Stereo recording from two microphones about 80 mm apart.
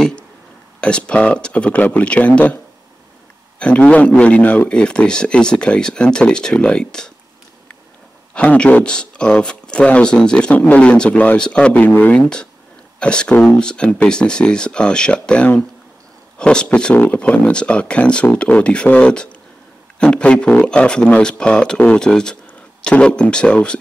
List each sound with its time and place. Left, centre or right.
0.7 s a man's voice: centre
8.4 s a man's voice: centre